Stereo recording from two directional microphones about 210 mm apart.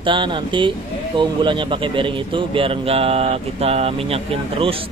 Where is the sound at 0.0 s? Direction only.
25° right (ahead or behind).